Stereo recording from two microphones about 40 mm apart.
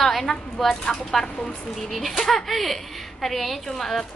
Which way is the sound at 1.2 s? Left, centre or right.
Centre.